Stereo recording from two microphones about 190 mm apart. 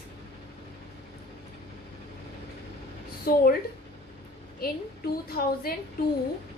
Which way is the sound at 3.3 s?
55° left (ahead or behind).